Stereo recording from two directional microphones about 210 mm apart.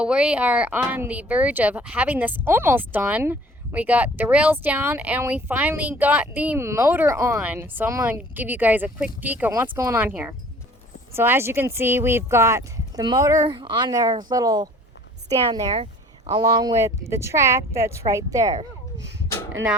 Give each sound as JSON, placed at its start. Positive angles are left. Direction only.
{"t": 0.0, "sound": "speech", "side_deg": -5}